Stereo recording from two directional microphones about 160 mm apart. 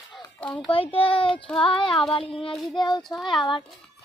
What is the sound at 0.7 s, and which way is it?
Speech, 35° left (ahead or behind).